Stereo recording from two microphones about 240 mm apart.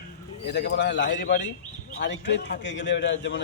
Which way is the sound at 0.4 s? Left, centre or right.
Left.